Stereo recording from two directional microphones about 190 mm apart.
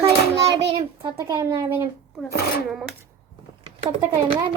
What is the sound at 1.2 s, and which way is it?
Speech, 20° right (ahead or behind).